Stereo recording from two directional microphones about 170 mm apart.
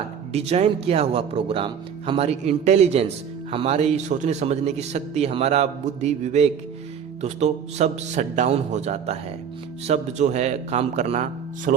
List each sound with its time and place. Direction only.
0.3 s a man's voice: 40° right (ahead or behind)